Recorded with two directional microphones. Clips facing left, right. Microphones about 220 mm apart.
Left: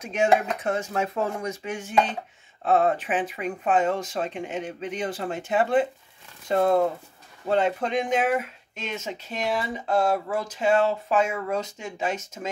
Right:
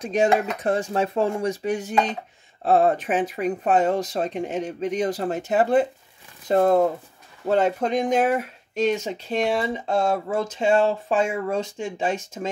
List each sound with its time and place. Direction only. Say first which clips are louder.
0.0 s speech: right 2 dB; 35° right (ahead or behind)